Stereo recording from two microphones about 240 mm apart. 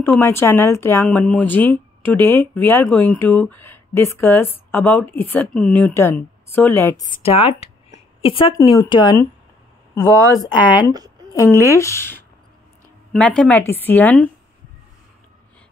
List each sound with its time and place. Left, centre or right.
0.0 s speech: centre
7.2 s a woman's voice: left
10.7 s speech: centre
11.6 s speech: centre
13.4 s speech: centre